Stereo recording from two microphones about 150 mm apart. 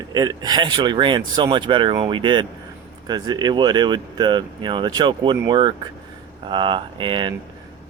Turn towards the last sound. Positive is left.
turn(degrees=-30)  # may be behind; listen again after turning